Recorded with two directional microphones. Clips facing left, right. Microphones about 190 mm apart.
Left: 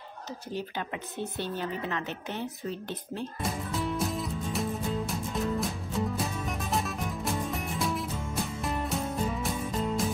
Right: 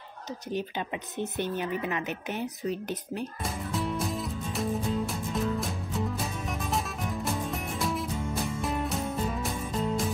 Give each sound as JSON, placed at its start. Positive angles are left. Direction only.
{"t": 0.5, "sound": "speech", "side_deg": -20}
{"t": 3.4, "sound": "music", "side_deg": 0}